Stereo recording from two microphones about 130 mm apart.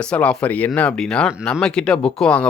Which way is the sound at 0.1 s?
10° left (ahead or behind).